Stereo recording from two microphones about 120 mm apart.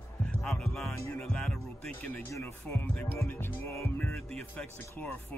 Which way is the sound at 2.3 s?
20° left (ahead or behind).